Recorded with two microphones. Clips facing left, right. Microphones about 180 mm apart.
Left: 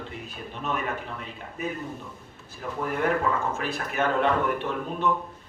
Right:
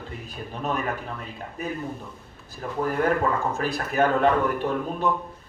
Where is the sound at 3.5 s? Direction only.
35° right (ahead or behind).